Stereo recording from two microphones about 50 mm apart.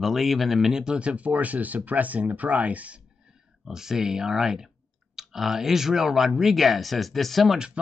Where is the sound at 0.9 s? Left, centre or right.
Right.